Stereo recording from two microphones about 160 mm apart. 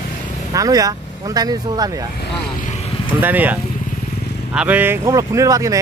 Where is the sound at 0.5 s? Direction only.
20° right (ahead or behind).